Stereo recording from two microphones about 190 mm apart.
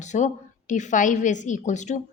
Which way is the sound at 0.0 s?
40° left (ahead or behind).